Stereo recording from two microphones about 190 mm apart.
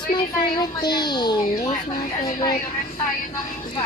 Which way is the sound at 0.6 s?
20° left (ahead or behind).